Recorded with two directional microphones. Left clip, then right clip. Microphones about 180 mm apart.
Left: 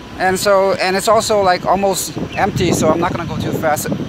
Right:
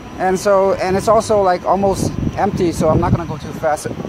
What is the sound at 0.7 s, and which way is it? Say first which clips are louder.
Speech: left 1 dB; 10° right (ahead or behind).